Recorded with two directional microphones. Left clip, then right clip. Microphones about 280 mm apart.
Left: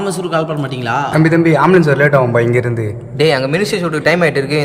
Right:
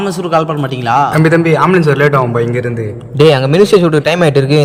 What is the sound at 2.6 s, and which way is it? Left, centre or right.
Speech, centre.